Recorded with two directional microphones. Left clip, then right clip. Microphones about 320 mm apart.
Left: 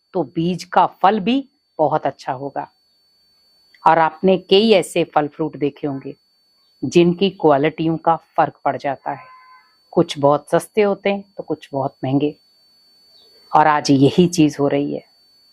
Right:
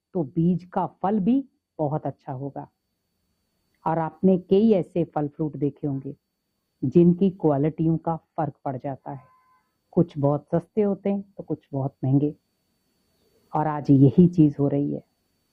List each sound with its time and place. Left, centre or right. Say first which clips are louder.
0.3 s a woman's voice: left 12 dB; centre
13.5 s a woman's voice: left 10 dB; centre